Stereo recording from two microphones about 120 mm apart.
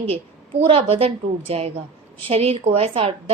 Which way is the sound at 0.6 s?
55° right (ahead or behind).